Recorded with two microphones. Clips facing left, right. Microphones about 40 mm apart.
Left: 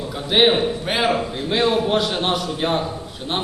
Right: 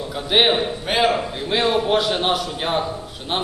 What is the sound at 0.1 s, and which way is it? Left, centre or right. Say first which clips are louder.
A man's voice: left 1 dB; centre.